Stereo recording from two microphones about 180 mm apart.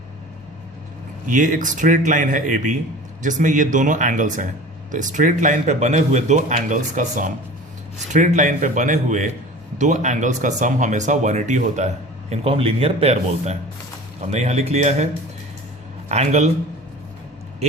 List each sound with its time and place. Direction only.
1.3 s a man's voice: 45° right (ahead or behind)
16.0 s speech: 40° right (ahead or behind)